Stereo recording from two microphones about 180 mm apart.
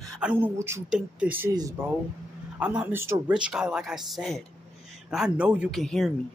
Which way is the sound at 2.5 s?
5° right (ahead or behind).